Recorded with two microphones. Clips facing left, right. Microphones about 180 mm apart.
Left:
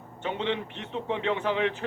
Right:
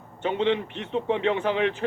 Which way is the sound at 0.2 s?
70° right (ahead or behind).